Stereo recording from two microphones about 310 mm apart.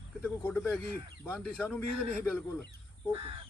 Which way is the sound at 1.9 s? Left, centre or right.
Centre.